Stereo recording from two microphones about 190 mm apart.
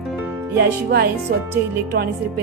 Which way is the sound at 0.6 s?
55° right (ahead or behind).